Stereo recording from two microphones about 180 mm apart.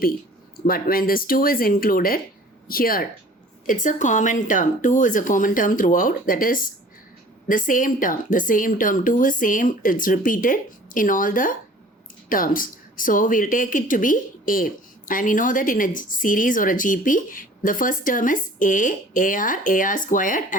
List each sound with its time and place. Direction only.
0.7 s speech: 55° left (ahead or behind)